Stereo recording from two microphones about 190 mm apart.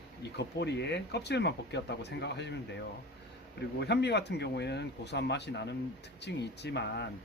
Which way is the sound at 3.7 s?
60° left (ahead or behind).